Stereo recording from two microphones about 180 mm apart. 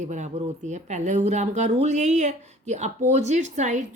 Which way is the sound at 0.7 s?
40° right (ahead or behind).